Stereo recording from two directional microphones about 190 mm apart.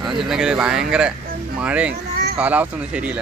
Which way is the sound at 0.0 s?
Centre (ahead or behind).